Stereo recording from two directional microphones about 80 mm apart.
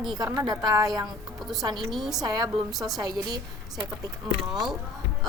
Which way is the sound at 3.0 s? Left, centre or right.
Right.